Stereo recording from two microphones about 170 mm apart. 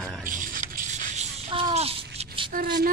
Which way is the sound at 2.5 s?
60° right (ahead or behind).